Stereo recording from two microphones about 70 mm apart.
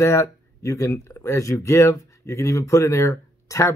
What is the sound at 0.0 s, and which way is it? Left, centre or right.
Speech, left.